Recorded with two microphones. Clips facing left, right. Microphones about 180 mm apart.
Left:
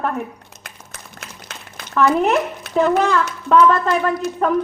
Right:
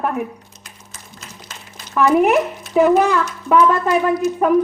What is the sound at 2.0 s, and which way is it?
Speech, 10° right (ahead or behind).